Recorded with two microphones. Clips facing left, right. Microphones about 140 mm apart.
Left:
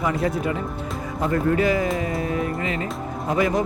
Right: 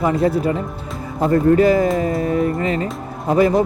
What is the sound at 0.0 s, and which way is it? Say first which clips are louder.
Speech: right 6 dB; 30° right (ahead or behind).